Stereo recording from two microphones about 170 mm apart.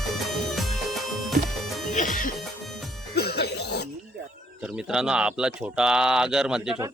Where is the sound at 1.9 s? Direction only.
50° left (ahead or behind).